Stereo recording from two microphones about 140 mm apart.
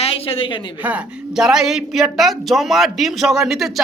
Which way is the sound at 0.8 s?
5° right (ahead or behind).